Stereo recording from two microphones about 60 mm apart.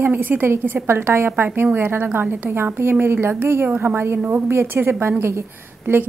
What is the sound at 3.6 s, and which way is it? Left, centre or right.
Speech, right.